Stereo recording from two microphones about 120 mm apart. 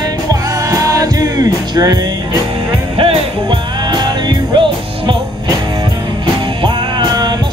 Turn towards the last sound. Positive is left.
turn(degrees=-35)  # may be behind; listen again after turning